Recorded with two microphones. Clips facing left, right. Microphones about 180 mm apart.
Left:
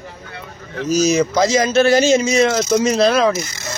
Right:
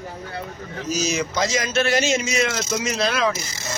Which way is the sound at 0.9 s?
45° left (ahead or behind).